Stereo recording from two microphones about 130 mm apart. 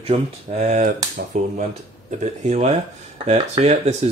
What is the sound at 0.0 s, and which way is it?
Speech, 60° right (ahead or behind).